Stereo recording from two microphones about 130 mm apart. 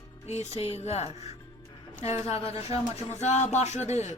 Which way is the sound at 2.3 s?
25° right (ahead or behind).